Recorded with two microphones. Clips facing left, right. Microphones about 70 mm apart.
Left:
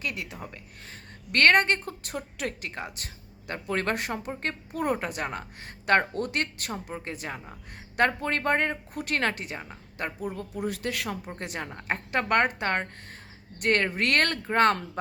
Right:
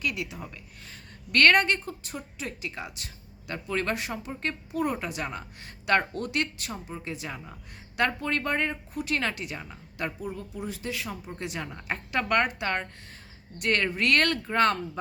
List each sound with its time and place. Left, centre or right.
0.0 s a woman's voice: left
10.3 s speech: left
11.3 s a woman's voice: left